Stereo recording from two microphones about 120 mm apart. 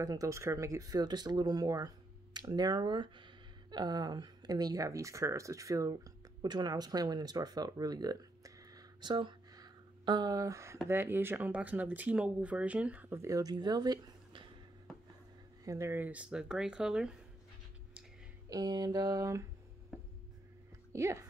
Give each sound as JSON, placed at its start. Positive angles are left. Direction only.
{"t": 0.0, "sound": "speech", "side_deg": -30}
{"t": 15.6, "sound": "speech", "side_deg": -25}
{"t": 18.5, "sound": "speech", "side_deg": -30}
{"t": 20.9, "sound": "speech", "side_deg": -25}